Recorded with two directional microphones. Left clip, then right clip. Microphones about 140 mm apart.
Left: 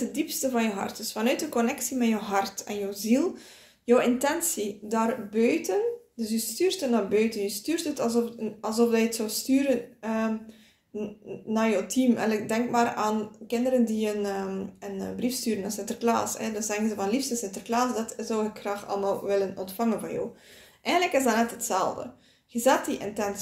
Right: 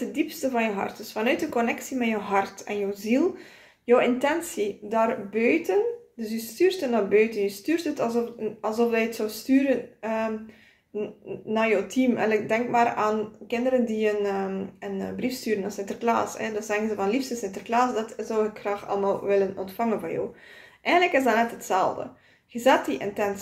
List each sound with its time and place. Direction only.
0.1 s speech: 35° left (ahead or behind)
11.5 s speech: 30° left (ahead or behind)
20.8 s speech: 35° left (ahead or behind)